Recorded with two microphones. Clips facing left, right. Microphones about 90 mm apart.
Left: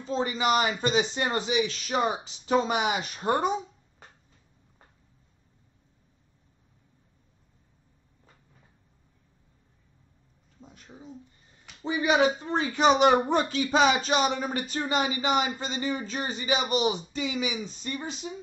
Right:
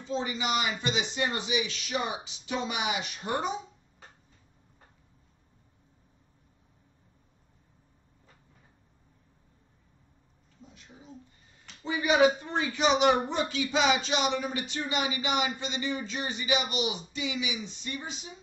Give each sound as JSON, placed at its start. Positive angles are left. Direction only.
{"t": 0.0, "sound": "speech", "side_deg": 45}
{"t": 10.6, "sound": "a sound", "side_deg": 40}
{"t": 11.8, "sound": "speech", "side_deg": 30}